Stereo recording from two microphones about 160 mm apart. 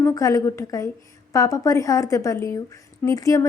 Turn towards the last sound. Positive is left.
turn(degrees=20)  # may be behind; listen again after turning